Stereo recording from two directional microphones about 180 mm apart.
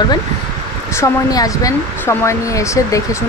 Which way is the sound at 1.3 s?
20° left (ahead or behind).